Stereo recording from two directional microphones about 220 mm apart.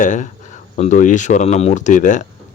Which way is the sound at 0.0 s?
35° left (ahead or behind).